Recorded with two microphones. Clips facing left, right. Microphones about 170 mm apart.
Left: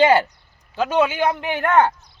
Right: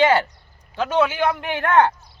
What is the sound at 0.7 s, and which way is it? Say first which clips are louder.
A man's voice: left 1 dB; 10° left (ahead or behind).